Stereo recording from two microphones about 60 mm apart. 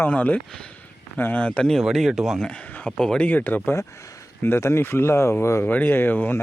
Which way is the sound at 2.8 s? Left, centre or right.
Centre.